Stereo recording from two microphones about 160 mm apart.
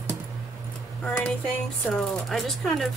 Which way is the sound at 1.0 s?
5° left (ahead or behind).